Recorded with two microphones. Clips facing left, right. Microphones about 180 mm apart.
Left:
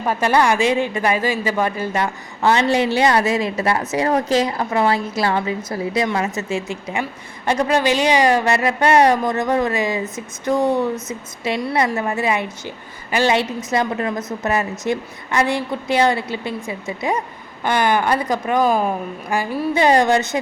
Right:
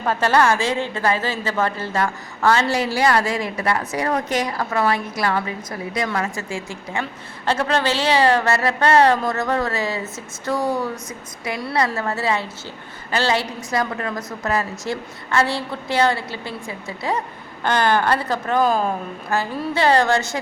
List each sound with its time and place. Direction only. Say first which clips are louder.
0.0 s a woman's voice: left 1 dB; 10° left (ahead or behind)